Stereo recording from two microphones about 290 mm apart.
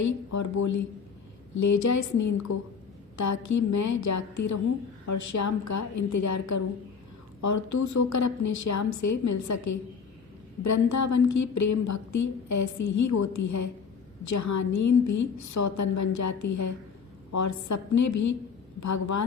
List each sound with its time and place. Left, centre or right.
0.0 s a woman's voice: left